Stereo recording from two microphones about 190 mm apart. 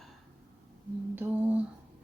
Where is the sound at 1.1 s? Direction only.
10° right (ahead or behind).